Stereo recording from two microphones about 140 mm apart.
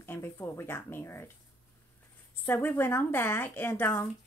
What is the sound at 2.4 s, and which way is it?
Speech, 15° left (ahead or behind).